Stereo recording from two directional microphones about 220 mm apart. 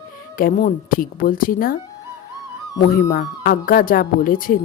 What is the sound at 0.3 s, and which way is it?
Speech, 35° left (ahead or behind).